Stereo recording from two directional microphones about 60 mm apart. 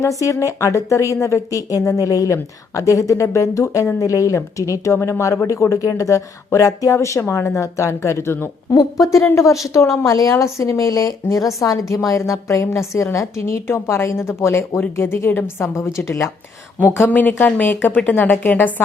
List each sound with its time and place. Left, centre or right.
0.0 s a woman's voice: left
8.7 s a woman's voice: left
10.0 s a woman's voice: left
10.3 s a woman's voice: left
16.8 s speech: left